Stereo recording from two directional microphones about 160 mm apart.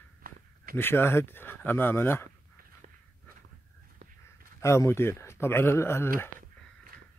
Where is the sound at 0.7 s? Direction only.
15° left (ahead or behind).